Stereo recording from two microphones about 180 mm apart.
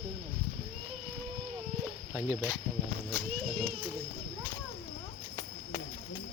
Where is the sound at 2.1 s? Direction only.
15° right (ahead or behind).